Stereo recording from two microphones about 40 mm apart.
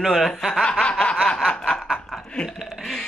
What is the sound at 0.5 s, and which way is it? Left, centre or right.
Snicker, centre.